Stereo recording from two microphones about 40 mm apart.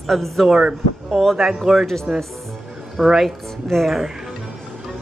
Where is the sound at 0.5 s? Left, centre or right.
Centre.